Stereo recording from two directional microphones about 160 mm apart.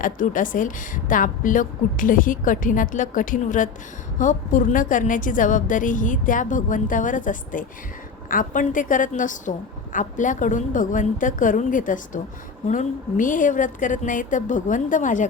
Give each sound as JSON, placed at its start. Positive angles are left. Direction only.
{"t": 0.0, "sound": "a woman's voice", "side_deg": 55}